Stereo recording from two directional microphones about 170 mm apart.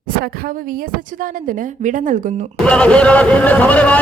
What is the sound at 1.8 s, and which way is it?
Speech, 50° right (ahead or behind).